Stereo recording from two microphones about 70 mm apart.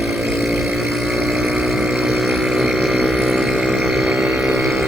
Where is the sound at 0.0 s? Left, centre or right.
Centre.